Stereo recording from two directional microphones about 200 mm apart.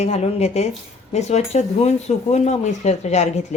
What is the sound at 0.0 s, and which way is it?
Speech, 35° left (ahead or behind).